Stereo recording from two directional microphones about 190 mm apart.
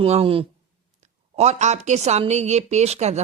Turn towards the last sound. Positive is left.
turn(degrees=-35)  # may be behind; listen again after turning